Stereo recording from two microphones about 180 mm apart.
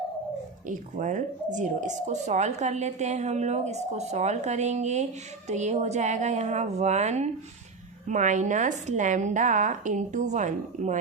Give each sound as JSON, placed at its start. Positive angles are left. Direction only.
{"t": 0.7, "sound": "a woman's voice", "side_deg": -45}